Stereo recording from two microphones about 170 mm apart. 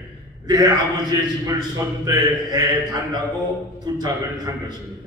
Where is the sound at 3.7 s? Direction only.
25° right (ahead or behind).